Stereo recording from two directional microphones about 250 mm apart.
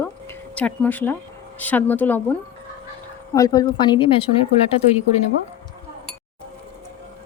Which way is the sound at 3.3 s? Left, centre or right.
Centre.